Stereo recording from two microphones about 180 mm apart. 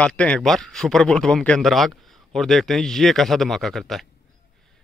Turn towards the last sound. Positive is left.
turn(degrees=0)  # may be behind; listen again after turning